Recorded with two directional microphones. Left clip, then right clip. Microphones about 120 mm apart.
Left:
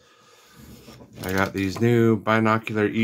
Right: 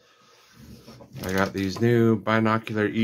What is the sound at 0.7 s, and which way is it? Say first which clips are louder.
Speech: even; 25° left (ahead or behind).